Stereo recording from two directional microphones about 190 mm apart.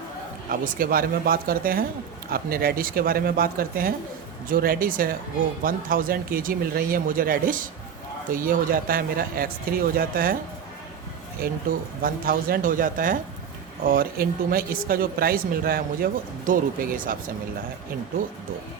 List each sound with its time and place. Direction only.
0.5 s speech: 50° right (ahead or behind)
11.4 s speech: 50° right (ahead or behind)